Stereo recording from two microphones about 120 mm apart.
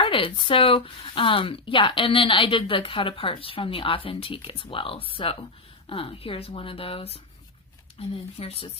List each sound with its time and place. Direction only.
0.0 s speech: 45° left (ahead or behind)